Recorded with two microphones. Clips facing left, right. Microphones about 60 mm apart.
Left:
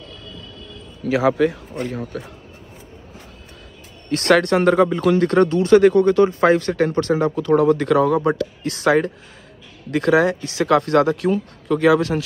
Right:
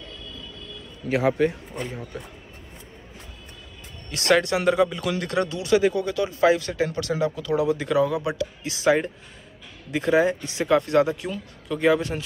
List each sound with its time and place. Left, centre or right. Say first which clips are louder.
1.0 s a man's voice: left 4 dB; left
4.1 s speech: left 5 dB; left